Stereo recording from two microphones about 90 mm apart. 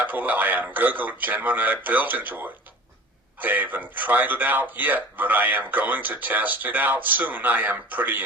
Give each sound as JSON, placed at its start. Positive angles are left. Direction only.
{"t": 0.0, "sound": "a man's voice", "side_deg": -20}